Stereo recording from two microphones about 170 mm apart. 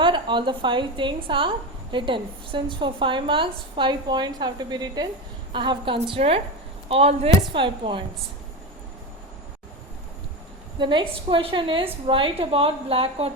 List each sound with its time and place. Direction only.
0.0 s a woman's voice: 30° right (ahead or behind)
10.8 s a woman's voice: 30° right (ahead or behind)